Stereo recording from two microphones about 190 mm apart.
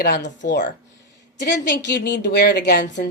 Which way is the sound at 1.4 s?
70° left (ahead or behind).